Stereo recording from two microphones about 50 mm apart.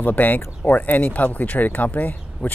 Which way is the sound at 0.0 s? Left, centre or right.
Left.